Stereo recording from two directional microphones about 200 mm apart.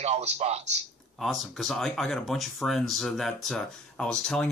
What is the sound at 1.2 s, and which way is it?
Speech, centre (ahead or behind).